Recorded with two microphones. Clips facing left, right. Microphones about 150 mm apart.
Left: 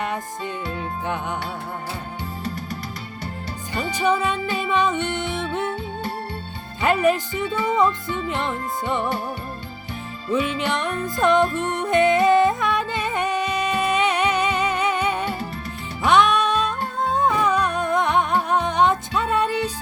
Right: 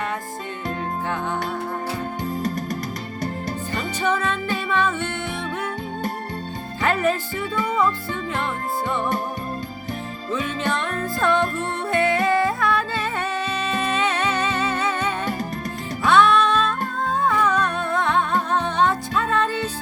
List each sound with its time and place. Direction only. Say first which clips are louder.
2.4 s music: right 3 dB; 45° right (ahead or behind)
3.8 s music: left 3 dB; 10° left (ahead or behind)
6.8 s speech: left 3 dB; 15° left (ahead or behind)
7.8 s music: left 2 dB; 20° left (ahead or behind)
10.4 s music: left 1 dB; 15° left (ahead or behind)